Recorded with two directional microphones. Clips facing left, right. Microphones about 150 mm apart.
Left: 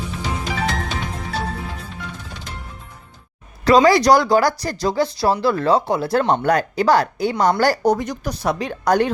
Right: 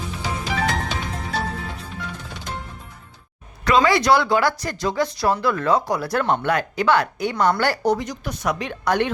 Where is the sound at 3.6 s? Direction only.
35° left (ahead or behind).